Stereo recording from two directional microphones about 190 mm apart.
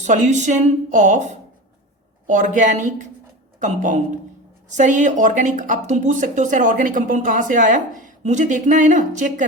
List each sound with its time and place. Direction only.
0.0 s speech: 40° right (ahead or behind)